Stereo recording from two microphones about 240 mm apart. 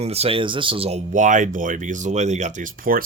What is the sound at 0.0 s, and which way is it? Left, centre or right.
Speech, right.